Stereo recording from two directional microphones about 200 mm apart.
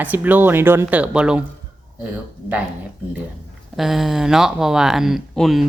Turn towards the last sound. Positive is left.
turn(degrees=0)  # may be behind; listen again after turning